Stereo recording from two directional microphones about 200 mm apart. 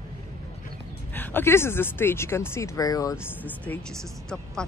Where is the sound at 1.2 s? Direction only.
10° left (ahead or behind).